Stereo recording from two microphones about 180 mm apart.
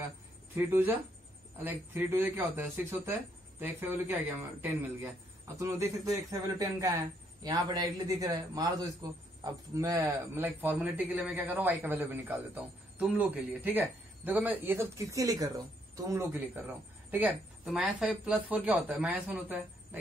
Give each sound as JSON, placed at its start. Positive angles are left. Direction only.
{"t": 0.6, "sound": "speech", "side_deg": -10}